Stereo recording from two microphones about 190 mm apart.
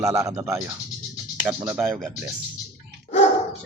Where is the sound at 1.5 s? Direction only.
10° right (ahead or behind).